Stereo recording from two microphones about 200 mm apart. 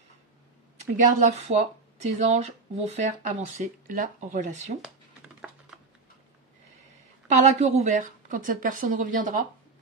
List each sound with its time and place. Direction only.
0.9 s speech: 35° right (ahead or behind)
4.8 s a sound: 5° right (ahead or behind)
7.2 s speech: 35° right (ahead or behind)